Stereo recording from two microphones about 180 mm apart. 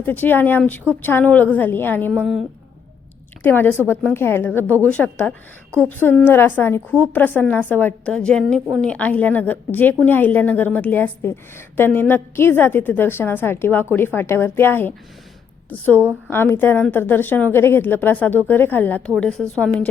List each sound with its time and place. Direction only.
0.0 s a woman's voice: 10° left (ahead or behind)
2.1 s a woman's voice: centre (ahead or behind)
3.4 s a woman's voice: 10° left (ahead or behind)
16.3 s a woman's voice: 10° left (ahead or behind)